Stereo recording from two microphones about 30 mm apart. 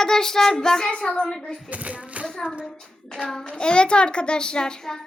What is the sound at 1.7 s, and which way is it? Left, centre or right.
Speech, right.